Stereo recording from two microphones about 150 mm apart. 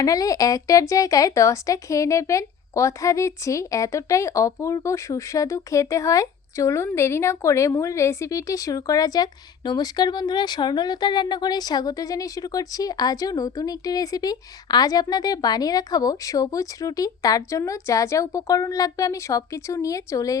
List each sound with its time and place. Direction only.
0.0 s a woman's voice: 25° left (ahead or behind)